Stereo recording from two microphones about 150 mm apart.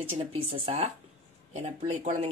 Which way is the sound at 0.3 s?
40° right (ahead or behind).